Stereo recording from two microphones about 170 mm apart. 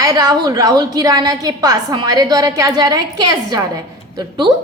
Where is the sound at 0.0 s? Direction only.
20° right (ahead or behind).